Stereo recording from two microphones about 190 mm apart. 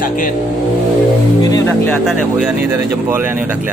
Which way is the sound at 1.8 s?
5° right (ahead or behind).